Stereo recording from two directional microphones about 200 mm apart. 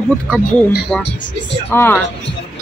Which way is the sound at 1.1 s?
60° left (ahead or behind).